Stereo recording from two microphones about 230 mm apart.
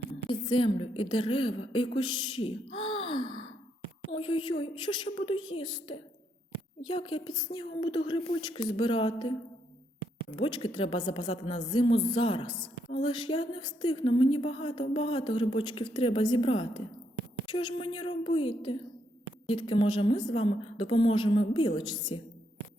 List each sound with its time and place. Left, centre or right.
0.3 s a woman's voice: left
2.0 s gasp: centre
4.1 s a woman's voice: left
10.3 s a woman's voice: left